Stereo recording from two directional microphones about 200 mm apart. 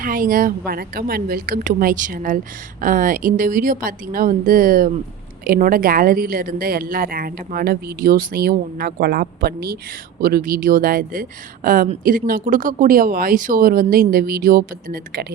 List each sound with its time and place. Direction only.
0.0 s speech: 45° right (ahead or behind)